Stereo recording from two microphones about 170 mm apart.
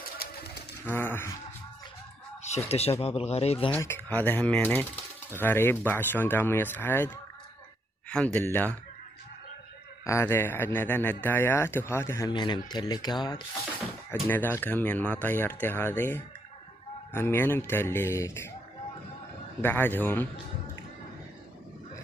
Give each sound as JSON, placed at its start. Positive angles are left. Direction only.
{"t": 0.9, "sound": "speech", "side_deg": 10}
{"t": 2.4, "sound": "speech", "side_deg": 40}
{"t": 3.8, "sound": "speech", "side_deg": 15}
{"t": 10.0, "sound": "speech", "side_deg": 15}
{"t": 12.3, "sound": "speech", "side_deg": 25}
{"t": 14.1, "sound": "speech", "side_deg": 10}
{"t": 19.6, "sound": "speech", "side_deg": 10}